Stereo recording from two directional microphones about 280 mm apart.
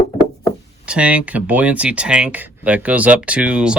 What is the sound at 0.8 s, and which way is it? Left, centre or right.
Speech, centre.